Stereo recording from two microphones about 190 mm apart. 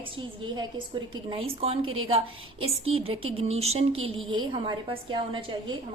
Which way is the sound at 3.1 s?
30° right (ahead or behind).